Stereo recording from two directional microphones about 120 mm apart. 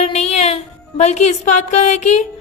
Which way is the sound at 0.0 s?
65° left (ahead or behind).